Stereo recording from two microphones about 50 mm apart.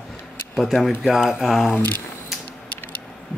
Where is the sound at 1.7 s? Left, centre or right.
Left.